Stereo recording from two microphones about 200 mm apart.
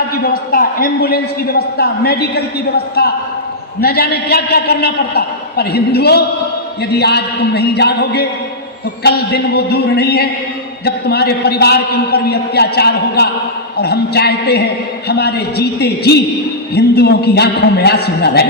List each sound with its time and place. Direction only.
0.2 s a man's voice: 50° left (ahead or behind)